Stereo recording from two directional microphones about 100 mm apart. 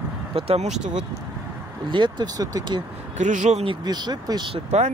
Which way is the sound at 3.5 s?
60° right (ahead or behind).